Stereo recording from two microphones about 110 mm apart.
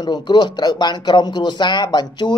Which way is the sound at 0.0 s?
40° left (ahead or behind).